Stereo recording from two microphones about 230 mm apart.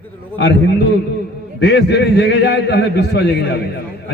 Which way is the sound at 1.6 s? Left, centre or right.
Left.